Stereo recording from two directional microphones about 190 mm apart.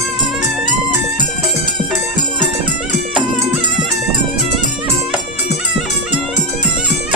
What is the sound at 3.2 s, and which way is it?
Music, 25° right (ahead or behind).